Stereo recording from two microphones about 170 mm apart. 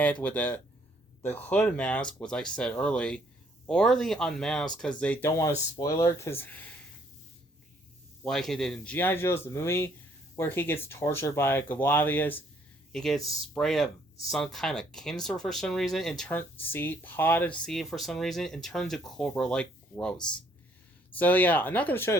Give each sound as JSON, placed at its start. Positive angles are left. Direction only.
{"t": 0.0, "sound": "speech", "side_deg": 10}
{"t": 8.2, "sound": "speech", "side_deg": 5}
{"t": 21.2, "sound": "speech", "side_deg": 10}